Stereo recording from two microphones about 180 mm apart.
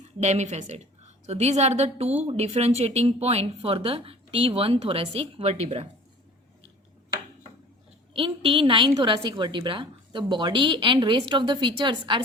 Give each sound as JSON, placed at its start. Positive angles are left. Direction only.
{"t": 0.2, "sound": "speech", "side_deg": -40}
{"t": 8.1, "sound": "a woman's voice", "side_deg": -30}